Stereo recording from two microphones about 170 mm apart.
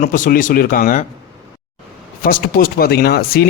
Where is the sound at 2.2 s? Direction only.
60° left (ahead or behind).